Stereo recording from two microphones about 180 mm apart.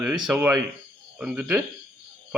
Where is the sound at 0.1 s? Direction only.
5° right (ahead or behind).